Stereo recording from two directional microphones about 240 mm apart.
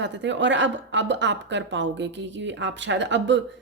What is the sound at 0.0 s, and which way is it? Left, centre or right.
Speech, right.